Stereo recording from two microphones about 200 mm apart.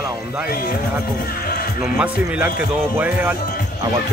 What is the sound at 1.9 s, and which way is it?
Speech, 5° right (ahead or behind).